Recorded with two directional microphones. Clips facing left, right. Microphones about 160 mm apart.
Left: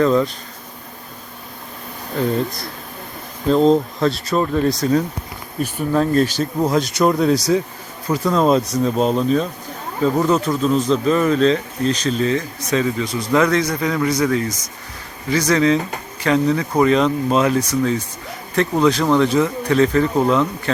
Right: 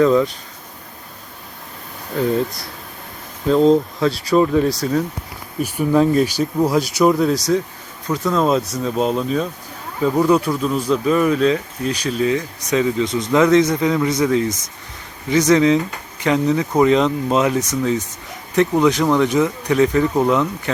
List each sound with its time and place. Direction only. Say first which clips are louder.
0.0 s speech: right 2 dB; 5° right (ahead or behind)
3.5 s speech: right 1 dB; 5° right (ahead or behind)